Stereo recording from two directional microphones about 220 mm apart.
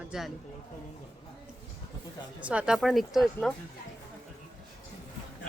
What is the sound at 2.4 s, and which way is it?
A woman's voice, 5° right (ahead or behind).